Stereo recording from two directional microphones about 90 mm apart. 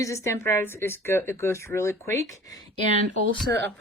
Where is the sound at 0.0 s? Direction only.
35° left (ahead or behind).